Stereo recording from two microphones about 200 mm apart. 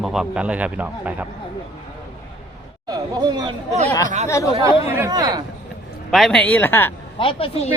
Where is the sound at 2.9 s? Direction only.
20° right (ahead or behind).